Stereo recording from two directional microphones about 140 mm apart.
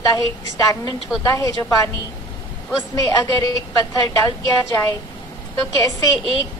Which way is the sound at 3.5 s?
25° left (ahead or behind).